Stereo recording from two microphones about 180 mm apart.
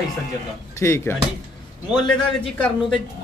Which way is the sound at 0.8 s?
15° left (ahead or behind).